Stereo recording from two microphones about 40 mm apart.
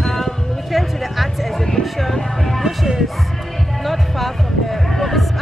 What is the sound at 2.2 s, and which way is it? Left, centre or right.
Speech, centre.